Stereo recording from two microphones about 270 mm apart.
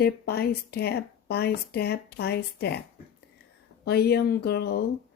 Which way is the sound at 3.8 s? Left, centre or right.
Left.